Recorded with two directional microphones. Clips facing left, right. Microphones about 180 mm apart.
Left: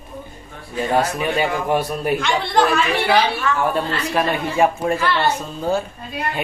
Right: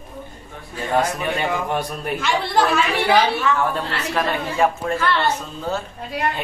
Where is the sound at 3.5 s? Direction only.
20° right (ahead or behind).